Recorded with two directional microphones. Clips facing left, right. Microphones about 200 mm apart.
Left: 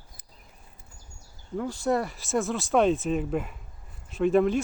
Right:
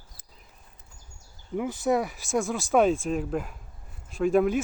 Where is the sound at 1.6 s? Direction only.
15° right (ahead or behind).